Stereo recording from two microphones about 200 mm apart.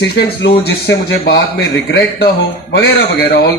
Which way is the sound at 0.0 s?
60° left (ahead or behind).